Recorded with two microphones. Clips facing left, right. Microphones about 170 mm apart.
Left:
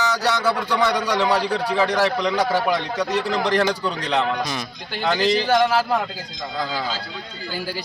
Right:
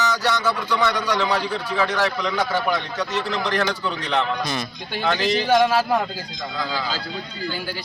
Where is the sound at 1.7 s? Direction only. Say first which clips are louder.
Left 2 dB; 35° left (ahead or behind).